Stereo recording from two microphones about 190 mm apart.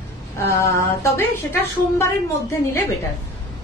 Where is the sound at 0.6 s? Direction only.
15° left (ahead or behind).